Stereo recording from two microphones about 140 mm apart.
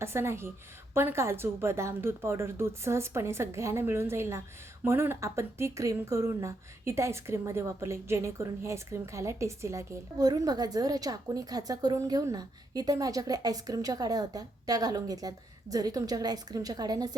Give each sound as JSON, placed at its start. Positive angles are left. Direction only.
{"t": 0.0, "sound": "a woman's voice", "side_deg": -20}